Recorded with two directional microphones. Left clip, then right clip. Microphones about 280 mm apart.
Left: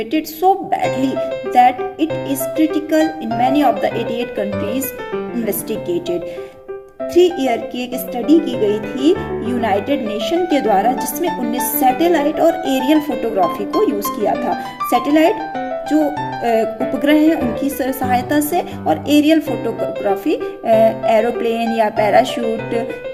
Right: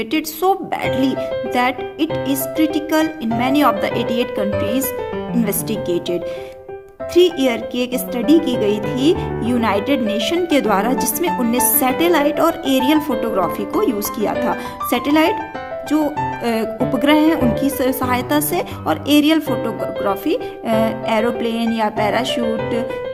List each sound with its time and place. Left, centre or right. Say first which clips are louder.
0.1 s speech: left 3 dB; centre
14.8 s speech: left 2 dB; centre